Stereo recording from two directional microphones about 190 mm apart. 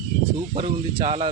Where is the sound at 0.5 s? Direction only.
25° right (ahead or behind).